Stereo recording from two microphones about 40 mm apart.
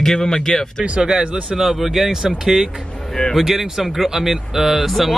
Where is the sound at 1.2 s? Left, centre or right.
Right.